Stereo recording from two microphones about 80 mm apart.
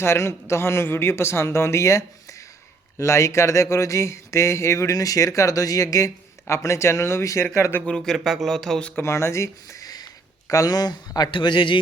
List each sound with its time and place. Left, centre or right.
0.0 s speech: left
7.9 s speech: centre
9.0 s speech: left
9.8 s a sound: left
10.5 s speech: left